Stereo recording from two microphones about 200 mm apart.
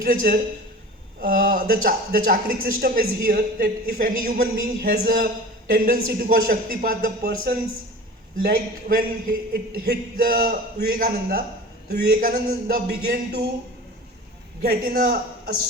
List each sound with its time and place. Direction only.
0.0 s speech: 45° right (ahead or behind)
14.6 s speech: 50° right (ahead or behind)